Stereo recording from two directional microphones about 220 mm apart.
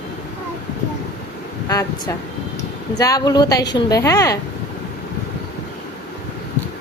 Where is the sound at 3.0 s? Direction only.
15° left (ahead or behind).